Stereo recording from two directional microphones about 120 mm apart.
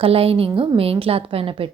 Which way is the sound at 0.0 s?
55° right (ahead or behind).